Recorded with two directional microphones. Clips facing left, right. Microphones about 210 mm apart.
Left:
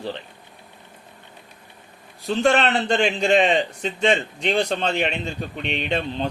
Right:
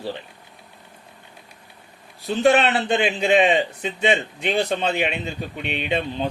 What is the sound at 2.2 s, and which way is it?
A man's voice, 5° right (ahead or behind).